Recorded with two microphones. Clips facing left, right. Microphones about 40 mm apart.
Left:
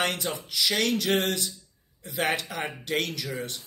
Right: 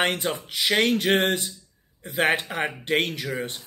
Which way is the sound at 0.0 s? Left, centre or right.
Right.